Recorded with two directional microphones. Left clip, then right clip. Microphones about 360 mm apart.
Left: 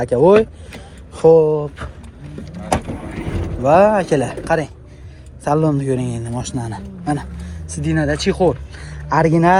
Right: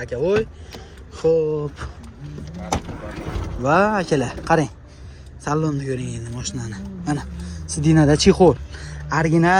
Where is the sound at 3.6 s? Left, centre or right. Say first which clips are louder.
Left 6 dB; centre.